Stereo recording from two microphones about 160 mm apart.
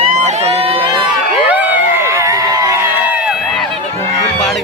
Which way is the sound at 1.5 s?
10° right (ahead or behind).